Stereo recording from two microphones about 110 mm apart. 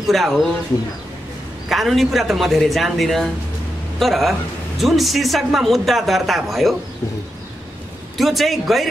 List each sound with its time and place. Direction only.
0.0 s a man's voice: centre (ahead or behind)
1.7 s a man's voice: centre (ahead or behind)
8.2 s a man's voice: centre (ahead or behind)